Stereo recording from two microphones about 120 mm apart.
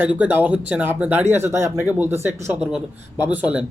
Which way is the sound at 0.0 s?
15° right (ahead or behind).